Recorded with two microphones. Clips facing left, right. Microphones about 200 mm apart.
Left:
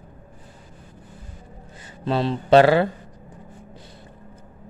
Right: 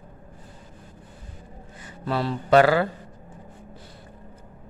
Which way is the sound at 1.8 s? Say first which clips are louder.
Left 3 dB; 25° left (ahead or behind).